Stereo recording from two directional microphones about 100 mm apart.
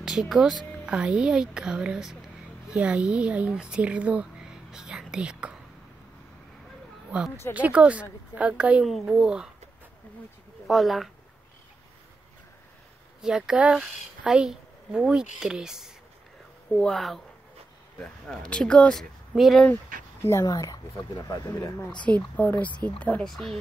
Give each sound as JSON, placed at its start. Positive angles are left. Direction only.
{"t": 0.0, "sound": "speech", "side_deg": -5}
{"t": 7.5, "sound": "speech", "side_deg": -15}
{"t": 10.7, "sound": "speech", "side_deg": 0}
{"t": 13.2, "sound": "speech", "side_deg": -5}
{"t": 16.7, "sound": "speech", "side_deg": 5}
{"t": 19.3, "sound": "speech", "side_deg": 0}
{"t": 19.7, "sound": "speech", "side_deg": 25}
{"t": 20.4, "sound": "speech", "side_deg": 40}
{"t": 22.0, "sound": "speech", "side_deg": 15}